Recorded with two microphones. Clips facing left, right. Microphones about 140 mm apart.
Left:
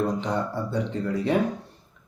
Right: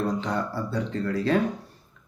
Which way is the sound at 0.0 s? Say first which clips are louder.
Left 1 dB; 20° left (ahead or behind).